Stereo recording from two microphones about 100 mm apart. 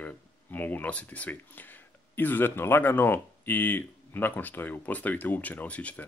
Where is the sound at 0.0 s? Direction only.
20° left (ahead or behind).